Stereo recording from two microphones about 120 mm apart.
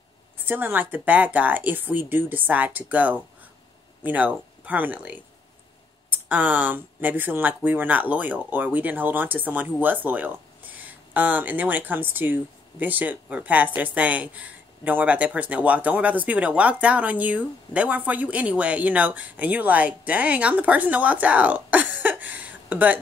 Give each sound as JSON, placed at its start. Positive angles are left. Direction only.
{"t": 0.5, "sound": "speech", "side_deg": -15}